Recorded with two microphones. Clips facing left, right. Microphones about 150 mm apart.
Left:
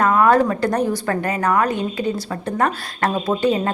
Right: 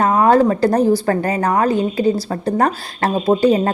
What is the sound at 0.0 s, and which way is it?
Speech, 30° right (ahead or behind).